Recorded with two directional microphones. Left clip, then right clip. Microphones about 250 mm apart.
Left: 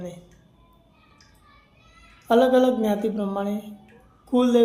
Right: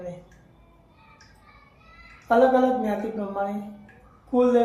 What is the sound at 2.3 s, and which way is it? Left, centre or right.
Speech, left.